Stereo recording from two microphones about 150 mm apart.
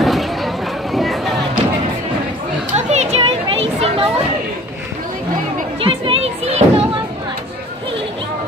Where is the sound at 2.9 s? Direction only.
45° right (ahead or behind).